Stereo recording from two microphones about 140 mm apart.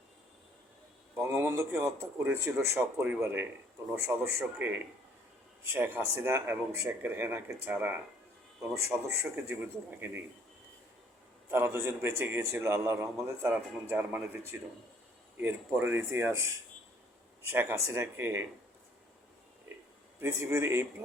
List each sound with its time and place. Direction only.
1.2 s a man's voice: 15° right (ahead or behind)
11.5 s a man's voice: 15° right (ahead or behind)
20.1 s speech: 20° right (ahead or behind)